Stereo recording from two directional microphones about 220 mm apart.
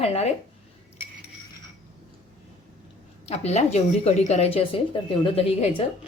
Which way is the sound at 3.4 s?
30° left (ahead or behind).